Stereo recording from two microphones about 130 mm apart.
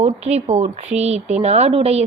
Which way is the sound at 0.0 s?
55° right (ahead or behind).